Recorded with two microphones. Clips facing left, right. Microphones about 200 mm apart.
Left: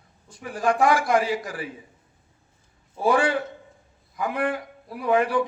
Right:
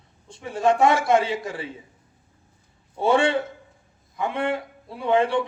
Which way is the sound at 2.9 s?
25° right (ahead or behind).